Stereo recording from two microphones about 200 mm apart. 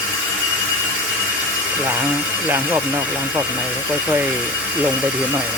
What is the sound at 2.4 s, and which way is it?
Speech, 10° right (ahead or behind).